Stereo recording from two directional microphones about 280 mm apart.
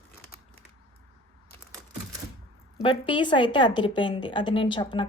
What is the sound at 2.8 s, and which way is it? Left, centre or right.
A woman's voice, centre.